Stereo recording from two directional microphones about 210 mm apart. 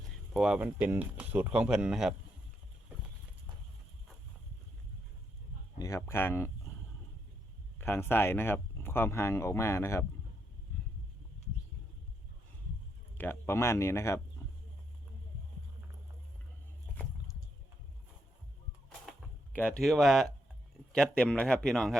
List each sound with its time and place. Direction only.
0.3 s speech: 5° right (ahead or behind)
5.8 s speech: 15° left (ahead or behind)
7.8 s speech: 10° left (ahead or behind)
13.1 s speech: 10° left (ahead or behind)
14.4 s a sound: 15° left (ahead or behind)
19.5 s speech: 5° left (ahead or behind)